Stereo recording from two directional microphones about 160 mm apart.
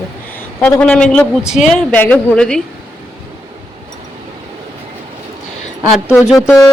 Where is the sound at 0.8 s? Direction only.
5° left (ahead or behind).